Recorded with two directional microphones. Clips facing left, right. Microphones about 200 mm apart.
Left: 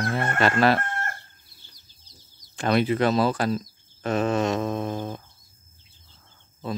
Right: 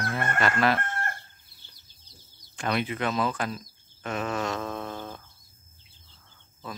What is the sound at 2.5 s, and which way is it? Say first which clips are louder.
Speech: left 7 dB; 35° left (ahead or behind).